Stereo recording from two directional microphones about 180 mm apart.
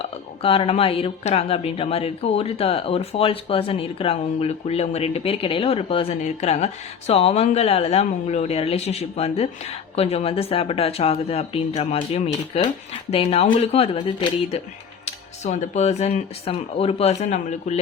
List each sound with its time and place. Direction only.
0.0 s speech: 30° left (ahead or behind)
15.0 s speech: 40° left (ahead or behind)